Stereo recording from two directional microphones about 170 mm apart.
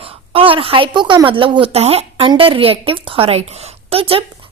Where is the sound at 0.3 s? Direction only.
30° right (ahead or behind).